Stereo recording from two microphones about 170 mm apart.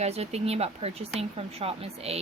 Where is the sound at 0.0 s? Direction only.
40° right (ahead or behind).